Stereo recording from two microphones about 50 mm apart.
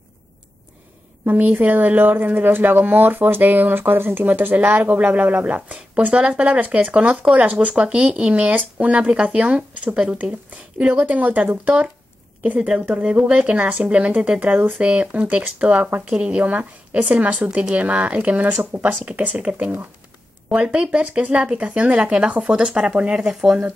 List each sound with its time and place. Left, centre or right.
1.2 s speech: right
10.8 s speech: right; by 23.6 s centre